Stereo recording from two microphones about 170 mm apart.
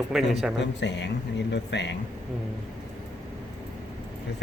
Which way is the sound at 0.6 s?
90° left.